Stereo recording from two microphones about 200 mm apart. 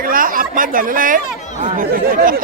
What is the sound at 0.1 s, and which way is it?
Chatter, 45° right (ahead or behind).